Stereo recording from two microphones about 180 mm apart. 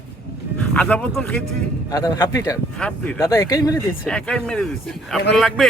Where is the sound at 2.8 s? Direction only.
5° left (ahead or behind).